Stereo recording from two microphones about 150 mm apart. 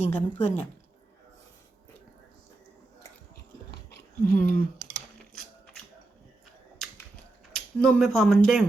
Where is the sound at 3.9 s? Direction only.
70° left (ahead or behind).